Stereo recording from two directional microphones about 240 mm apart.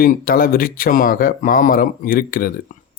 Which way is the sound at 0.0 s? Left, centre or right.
Left.